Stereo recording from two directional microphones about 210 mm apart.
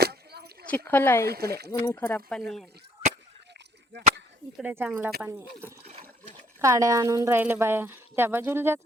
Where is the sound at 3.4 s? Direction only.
55° right (ahead or behind).